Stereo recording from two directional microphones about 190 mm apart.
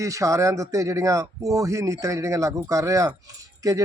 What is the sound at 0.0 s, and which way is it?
A man's voice, 15° right (ahead or behind).